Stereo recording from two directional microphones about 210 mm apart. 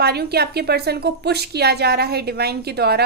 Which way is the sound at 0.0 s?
50° right (ahead or behind).